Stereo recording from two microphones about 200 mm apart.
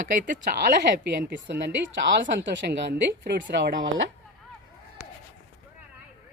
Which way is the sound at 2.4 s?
55° right (ahead or behind).